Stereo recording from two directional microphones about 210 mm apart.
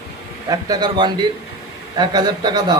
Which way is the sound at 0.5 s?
20° right (ahead or behind).